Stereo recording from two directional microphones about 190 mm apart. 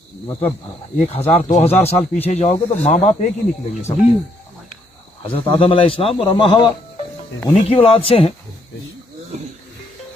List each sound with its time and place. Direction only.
0.9 s a man's voice: 35° left (ahead or behind)
5.2 s a man's voice: 30° left (ahead or behind)